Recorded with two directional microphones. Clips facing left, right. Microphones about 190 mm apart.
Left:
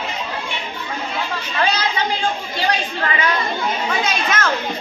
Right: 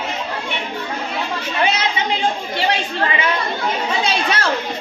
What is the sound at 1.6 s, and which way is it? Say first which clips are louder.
Chatter: right 1 dB; 25° right (ahead or behind).